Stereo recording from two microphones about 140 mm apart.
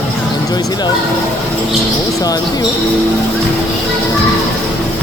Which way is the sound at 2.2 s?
25° left (ahead or behind).